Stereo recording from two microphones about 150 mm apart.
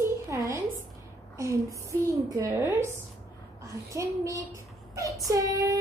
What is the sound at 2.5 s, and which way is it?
Speech, 15° right (ahead or behind).